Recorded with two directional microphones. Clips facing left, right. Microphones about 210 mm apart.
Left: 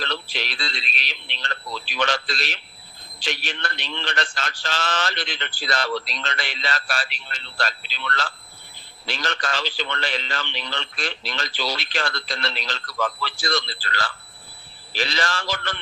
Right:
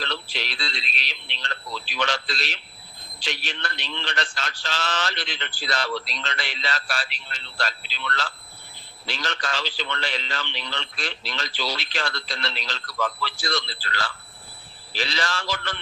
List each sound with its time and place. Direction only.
0.0 s a man's voice: 55° left (ahead or behind)